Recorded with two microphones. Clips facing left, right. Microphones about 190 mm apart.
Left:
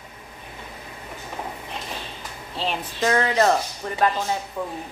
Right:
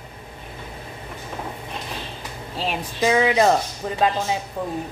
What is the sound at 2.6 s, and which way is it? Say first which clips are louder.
Speech: right 2 dB; 10° right (ahead or behind).